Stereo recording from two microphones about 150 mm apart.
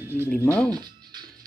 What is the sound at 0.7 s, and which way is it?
Music, 30° right (ahead or behind).